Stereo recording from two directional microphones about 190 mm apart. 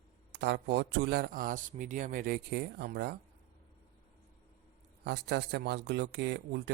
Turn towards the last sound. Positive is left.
turn(degrees=-65)  # may be behind; listen again after turning